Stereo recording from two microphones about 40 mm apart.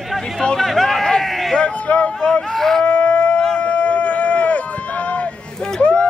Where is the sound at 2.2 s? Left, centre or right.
Centre.